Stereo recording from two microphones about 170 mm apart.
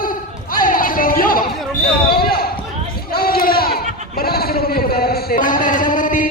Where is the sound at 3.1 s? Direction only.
60° left (ahead or behind).